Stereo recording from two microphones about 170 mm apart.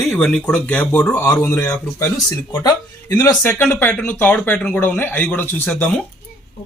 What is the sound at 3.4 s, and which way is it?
Speech, 10° left (ahead or behind).